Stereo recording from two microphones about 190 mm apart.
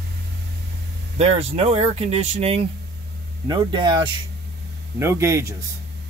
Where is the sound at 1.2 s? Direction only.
30° right (ahead or behind).